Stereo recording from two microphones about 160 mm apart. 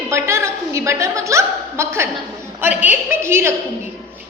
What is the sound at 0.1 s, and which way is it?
Chuckle, 15° right (ahead or behind).